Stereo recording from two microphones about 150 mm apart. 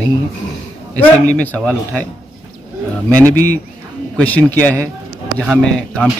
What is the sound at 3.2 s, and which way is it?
Speech, 10° left (ahead or behind).